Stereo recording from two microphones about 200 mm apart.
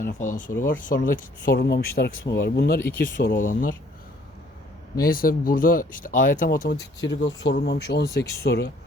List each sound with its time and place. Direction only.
0.0 s speech: 45° left (ahead or behind)
4.9 s speech: 45° left (ahead or behind)
7.0 s speech: 65° left (ahead or behind)
7.5 s speech: 55° left (ahead or behind)